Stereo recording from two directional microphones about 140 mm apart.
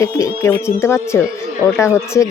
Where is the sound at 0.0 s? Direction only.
20° left (ahead or behind).